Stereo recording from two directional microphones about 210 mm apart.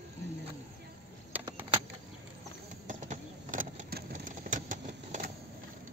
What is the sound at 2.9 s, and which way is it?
Vehicle, 35° right (ahead or behind).